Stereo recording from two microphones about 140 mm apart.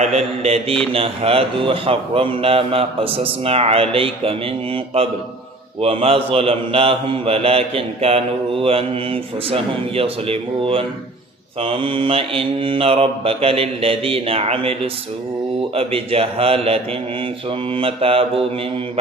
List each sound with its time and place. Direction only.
0.4 s a man's voice: 45° right (ahead or behind)